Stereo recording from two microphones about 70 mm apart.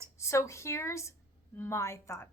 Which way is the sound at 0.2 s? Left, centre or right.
Left.